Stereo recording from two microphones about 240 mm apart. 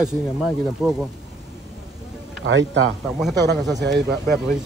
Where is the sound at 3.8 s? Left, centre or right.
Right.